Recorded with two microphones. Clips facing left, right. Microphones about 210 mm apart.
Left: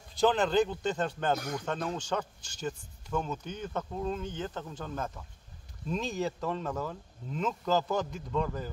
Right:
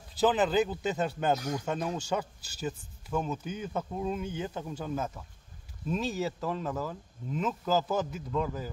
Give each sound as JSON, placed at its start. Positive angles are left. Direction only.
{"t": 0.1, "sound": "speech", "side_deg": -5}